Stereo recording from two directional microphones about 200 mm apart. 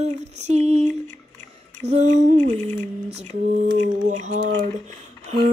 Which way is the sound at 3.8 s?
40° right (ahead or behind).